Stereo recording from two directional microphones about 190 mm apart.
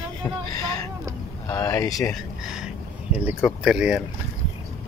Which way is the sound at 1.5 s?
15° left (ahead or behind).